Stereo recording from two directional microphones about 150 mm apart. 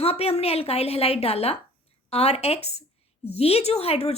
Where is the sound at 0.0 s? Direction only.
40° left (ahead or behind).